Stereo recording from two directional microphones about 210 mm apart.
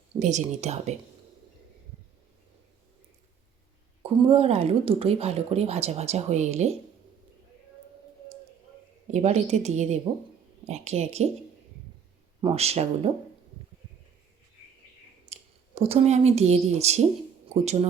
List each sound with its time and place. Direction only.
0.1 s a woman's voice: 35° right (ahead or behind)
4.0 s speech: 25° right (ahead or behind)
9.0 s a woman's voice: 35° right (ahead or behind)
12.4 s speech: 30° right (ahead or behind)
15.3 s speech: 30° right (ahead or behind)